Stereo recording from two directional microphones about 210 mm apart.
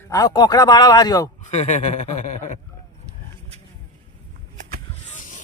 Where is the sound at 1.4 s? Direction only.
35° left (ahead or behind).